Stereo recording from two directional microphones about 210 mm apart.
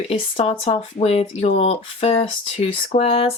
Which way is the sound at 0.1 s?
30° left (ahead or behind).